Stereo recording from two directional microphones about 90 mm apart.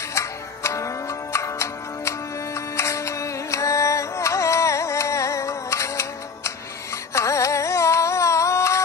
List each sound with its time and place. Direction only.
0.1 s music: 35° left (ahead or behind)
7.2 s carnatic music: 35° left (ahead or behind)